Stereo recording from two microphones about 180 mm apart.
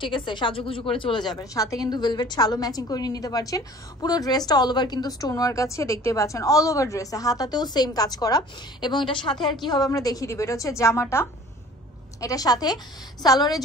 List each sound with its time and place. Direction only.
0.0 s a woman's voice: 25° left (ahead or behind)